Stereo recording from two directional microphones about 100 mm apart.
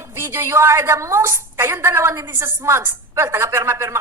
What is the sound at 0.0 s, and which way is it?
A woman's voice, 25° right (ahead or behind).